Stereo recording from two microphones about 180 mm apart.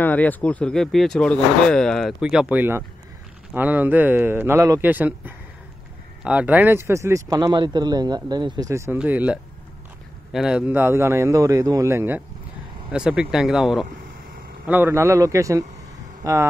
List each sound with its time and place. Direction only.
0.0 s a man's voice: 10° left (ahead or behind); by 15.6 s 20° right (ahead or behind)